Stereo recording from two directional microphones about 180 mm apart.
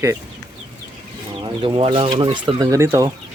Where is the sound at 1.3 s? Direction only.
30° right (ahead or behind).